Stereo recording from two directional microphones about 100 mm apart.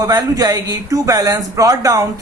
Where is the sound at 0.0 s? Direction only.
40° right (ahead or behind).